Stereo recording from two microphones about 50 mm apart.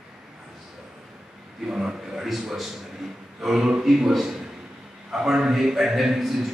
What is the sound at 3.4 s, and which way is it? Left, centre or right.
A man's voice, centre.